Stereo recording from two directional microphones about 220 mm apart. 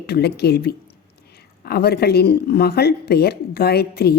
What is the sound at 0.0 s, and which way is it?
A woman's voice, 45° left (ahead or behind).